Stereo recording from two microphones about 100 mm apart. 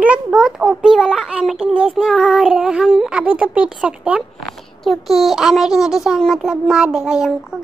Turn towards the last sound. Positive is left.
turn(degrees=-5)  # may be behind; listen again after turning